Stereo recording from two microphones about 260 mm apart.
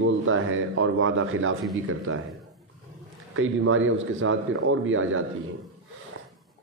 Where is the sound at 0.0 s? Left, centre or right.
Right.